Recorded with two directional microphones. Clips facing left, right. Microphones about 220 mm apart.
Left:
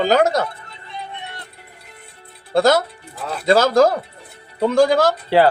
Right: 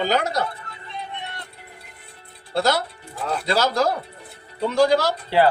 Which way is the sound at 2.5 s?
50° left (ahead or behind).